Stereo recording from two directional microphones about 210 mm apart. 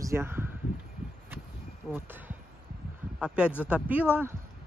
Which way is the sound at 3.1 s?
5° right (ahead or behind).